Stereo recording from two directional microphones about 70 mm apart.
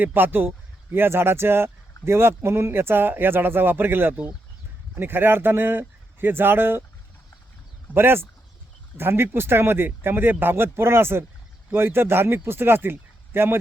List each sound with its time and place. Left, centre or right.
0.0 s speech: right
7.9 s speech: right